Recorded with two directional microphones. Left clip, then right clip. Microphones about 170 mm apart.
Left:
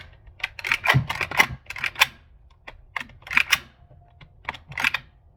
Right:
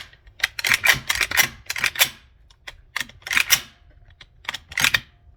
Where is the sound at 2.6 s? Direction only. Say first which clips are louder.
Right 3 dB; 20° right (ahead or behind).